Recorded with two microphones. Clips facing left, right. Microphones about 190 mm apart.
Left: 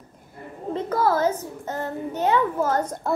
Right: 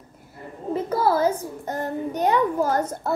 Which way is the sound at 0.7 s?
10° right (ahead or behind).